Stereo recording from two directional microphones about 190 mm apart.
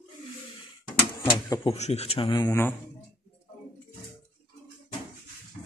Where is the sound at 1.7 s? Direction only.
35° left (ahead or behind); by 2.8 s 15° left (ahead or behind).